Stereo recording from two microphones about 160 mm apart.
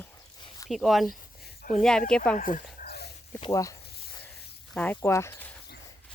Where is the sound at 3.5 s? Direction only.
20° left (ahead or behind).